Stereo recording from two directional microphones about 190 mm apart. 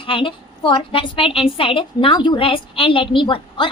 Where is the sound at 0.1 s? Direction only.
25° left (ahead or behind).